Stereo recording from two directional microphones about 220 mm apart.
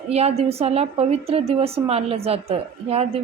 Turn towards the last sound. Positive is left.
turn(degrees=-25)  # may be behind; listen again after turning